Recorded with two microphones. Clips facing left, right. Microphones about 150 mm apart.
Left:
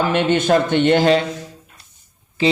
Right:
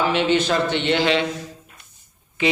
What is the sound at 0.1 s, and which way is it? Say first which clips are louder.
A man's voice: left 4 dB; 50° left (ahead or behind).